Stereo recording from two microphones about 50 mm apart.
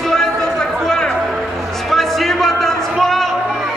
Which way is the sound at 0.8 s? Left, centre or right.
Centre.